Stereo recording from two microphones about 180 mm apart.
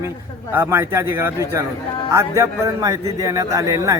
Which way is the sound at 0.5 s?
15° right (ahead or behind).